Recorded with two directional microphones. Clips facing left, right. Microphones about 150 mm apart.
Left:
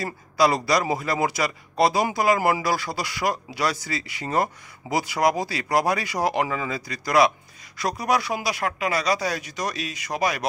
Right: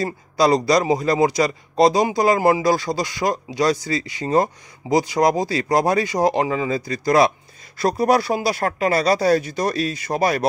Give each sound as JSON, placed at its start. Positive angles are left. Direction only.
{"t": 0.0, "sound": "a man's voice", "side_deg": -20}